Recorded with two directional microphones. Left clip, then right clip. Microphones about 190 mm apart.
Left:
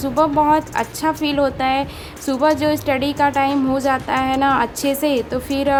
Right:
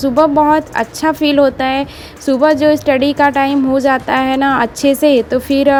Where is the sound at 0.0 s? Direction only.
25° right (ahead or behind).